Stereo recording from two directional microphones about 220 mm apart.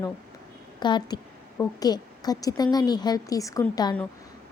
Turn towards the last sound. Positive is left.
turn(degrees=15)  # may be behind; listen again after turning